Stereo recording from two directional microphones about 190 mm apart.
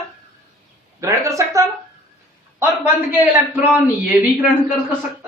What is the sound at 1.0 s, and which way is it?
Speech, 15° right (ahead or behind).